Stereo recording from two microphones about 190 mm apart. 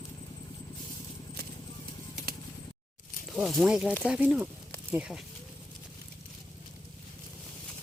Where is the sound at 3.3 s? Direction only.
Centre (ahead or behind).